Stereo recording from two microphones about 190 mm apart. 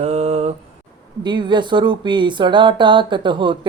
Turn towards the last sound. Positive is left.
turn(degrees=-25)  # may be behind; listen again after turning